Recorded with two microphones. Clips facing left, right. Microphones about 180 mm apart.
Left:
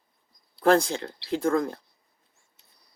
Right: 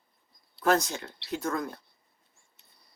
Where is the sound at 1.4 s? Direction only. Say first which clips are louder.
Left 8 dB; 55° left (ahead or behind).